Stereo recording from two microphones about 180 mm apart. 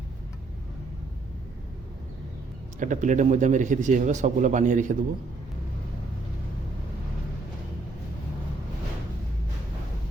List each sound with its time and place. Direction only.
2.7 s a man's voice: 45° right (ahead or behind)